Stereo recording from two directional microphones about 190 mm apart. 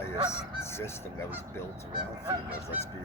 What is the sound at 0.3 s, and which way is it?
Speech, 15° left (ahead or behind).